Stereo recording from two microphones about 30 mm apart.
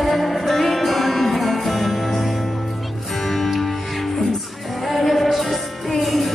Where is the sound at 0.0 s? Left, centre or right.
Centre.